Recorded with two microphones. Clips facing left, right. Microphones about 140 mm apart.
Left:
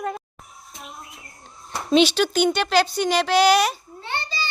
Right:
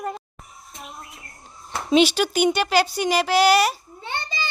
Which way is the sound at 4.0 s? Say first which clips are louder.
Left 1 dB; 15° right (ahead or behind).